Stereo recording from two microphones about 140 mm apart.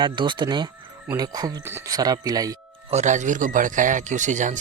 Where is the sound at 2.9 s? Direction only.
60° right (ahead or behind).